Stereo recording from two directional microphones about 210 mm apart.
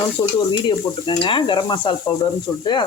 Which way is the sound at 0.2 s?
25° left (ahead or behind).